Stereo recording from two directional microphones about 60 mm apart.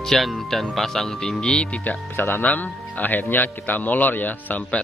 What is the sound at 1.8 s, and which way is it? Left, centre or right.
A man's voice, left.